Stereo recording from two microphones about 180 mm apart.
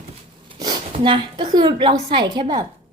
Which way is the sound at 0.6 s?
25° right (ahead or behind).